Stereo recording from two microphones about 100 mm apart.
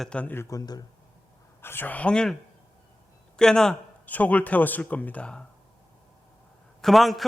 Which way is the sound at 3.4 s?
5° left (ahead or behind).